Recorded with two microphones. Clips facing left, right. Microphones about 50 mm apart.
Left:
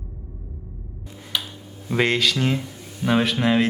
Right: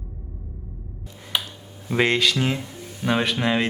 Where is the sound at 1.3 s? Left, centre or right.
Right.